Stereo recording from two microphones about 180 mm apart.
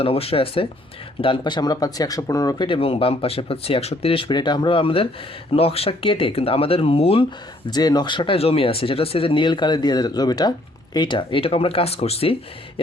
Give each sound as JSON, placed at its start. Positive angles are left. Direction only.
{"t": 0.0, "sound": "speech", "side_deg": 30}